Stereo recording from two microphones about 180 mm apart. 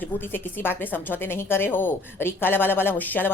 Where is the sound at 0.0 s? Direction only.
10° left (ahead or behind).